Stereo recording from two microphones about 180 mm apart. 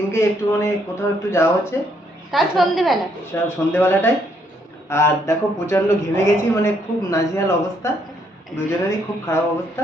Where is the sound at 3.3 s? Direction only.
10° left (ahead or behind).